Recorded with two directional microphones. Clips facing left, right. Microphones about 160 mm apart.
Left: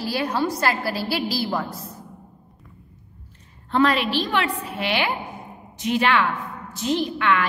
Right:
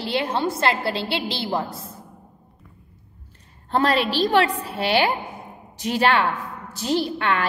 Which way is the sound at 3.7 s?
35° right (ahead or behind).